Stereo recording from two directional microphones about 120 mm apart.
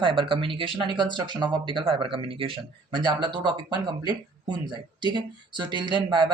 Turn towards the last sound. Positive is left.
turn(degrees=-40)  # may be behind; listen again after turning